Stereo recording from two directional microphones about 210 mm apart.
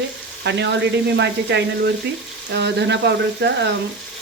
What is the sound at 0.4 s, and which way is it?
Speech, 55° right (ahead or behind).